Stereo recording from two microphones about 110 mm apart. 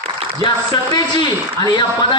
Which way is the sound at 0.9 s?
40° left (ahead or behind).